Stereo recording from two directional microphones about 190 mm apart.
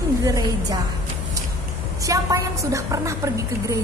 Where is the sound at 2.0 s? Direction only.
15° right (ahead or behind).